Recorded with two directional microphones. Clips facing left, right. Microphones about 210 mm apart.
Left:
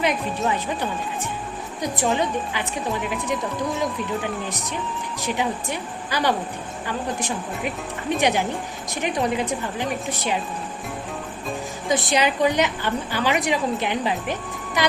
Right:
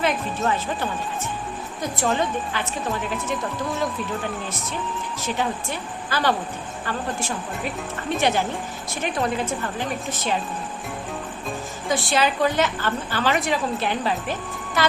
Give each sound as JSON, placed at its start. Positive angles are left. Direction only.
{"t": 0.0, "sound": "a woman's voice", "side_deg": 15}
{"t": 3.8, "sound": "a woman's voice", "side_deg": 15}
{"t": 11.9, "sound": "a woman's voice", "side_deg": 20}